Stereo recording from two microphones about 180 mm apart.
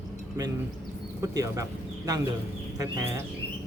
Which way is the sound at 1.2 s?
20° right (ahead or behind).